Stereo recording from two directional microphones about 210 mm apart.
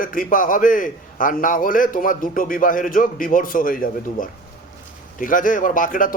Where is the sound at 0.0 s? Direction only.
40° left (ahead or behind).